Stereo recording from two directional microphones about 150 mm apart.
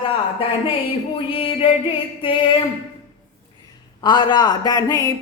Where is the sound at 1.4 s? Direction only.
40° left (ahead or behind).